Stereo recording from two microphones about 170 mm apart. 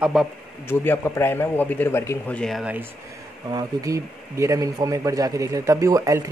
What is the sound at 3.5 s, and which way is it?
A man's voice, 20° right (ahead or behind).